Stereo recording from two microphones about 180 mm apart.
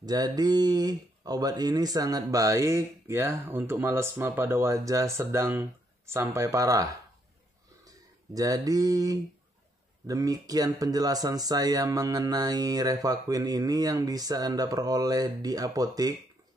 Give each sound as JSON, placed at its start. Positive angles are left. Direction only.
{"t": 0.0, "sound": "speech", "side_deg": -20}